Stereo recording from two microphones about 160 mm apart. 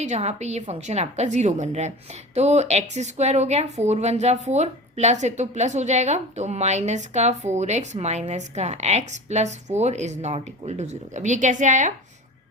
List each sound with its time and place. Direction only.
0.0 s speech: 45° right (ahead or behind)